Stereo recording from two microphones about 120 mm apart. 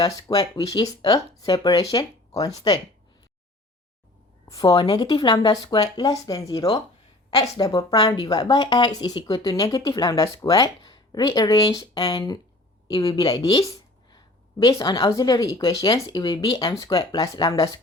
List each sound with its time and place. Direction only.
0.0 s speech: 30° left (ahead or behind)
4.4 s speech: 30° left (ahead or behind)
13.5 s a sound: 30° left (ahead or behind)
14.6 s speech: 30° left (ahead or behind)